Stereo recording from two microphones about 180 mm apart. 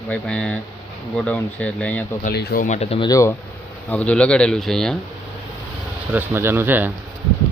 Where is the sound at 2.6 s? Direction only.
35° left (ahead or behind).